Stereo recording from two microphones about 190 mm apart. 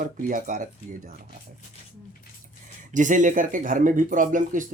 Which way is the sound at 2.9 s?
40° right (ahead or behind).